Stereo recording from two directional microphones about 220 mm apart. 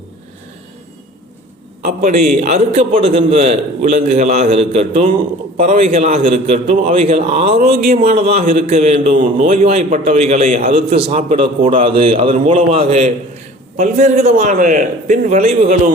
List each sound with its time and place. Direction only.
2.0 s a man's voice: 35° right (ahead or behind)